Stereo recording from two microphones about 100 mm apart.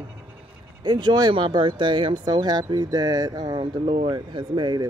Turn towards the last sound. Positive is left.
turn(degrees=-45)  # may be behind; listen again after turning